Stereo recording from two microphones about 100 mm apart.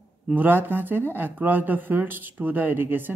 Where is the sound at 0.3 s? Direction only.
20° right (ahead or behind).